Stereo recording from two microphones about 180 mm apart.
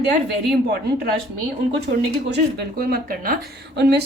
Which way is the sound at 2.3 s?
55° right (ahead or behind).